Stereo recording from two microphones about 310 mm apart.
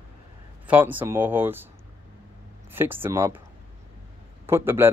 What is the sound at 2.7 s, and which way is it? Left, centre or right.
Speech, centre.